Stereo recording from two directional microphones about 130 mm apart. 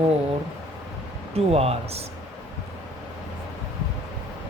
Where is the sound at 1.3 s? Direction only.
50° right (ahead or behind).